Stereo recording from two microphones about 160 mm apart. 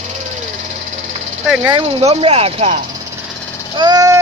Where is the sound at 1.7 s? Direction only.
35° right (ahead or behind).